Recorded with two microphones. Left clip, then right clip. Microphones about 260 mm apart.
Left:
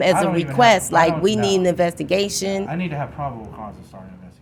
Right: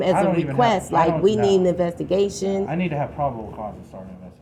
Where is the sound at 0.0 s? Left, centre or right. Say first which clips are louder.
Left 2 dB; left.